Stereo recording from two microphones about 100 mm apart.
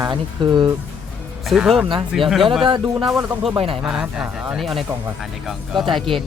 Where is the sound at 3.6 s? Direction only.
70° right (ahead or behind).